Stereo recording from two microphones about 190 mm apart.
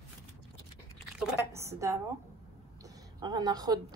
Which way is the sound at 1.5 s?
15° right (ahead or behind).